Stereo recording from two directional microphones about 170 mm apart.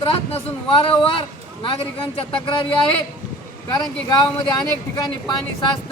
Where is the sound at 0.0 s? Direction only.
30° left (ahead or behind).